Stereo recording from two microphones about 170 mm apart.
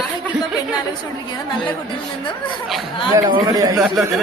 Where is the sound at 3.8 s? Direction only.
Centre (ahead or behind).